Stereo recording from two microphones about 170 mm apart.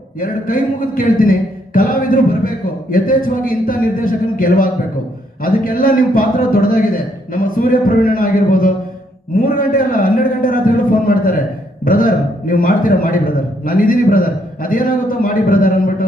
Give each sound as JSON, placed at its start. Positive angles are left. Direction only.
{"t": 0.2, "sound": "a man's voice", "side_deg": 55}